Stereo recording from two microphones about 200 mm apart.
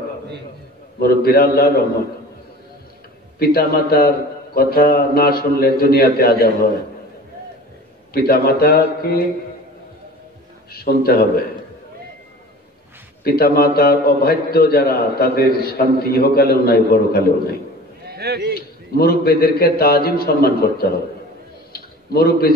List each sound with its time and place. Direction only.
0.9 s a man's voice: 50° left (ahead or behind)
3.3 s a man's voice: 50° left (ahead or behind)
8.1 s a man's voice: 50° left (ahead or behind)
10.7 s a man's voice: 50° left (ahead or behind)
13.2 s a man's voice: 50° left (ahead or behind)
18.1 s a sound: 55° right (ahead or behind)
18.5 s a man's voice: 50° left (ahead or behind)
21.7 s a sound: 50° left (ahead or behind)